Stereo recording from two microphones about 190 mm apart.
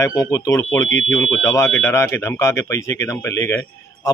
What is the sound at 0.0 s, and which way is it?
Speech, 15° left (ahead or behind).